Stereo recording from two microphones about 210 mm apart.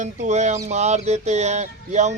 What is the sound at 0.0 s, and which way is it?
Music, 35° right (ahead or behind).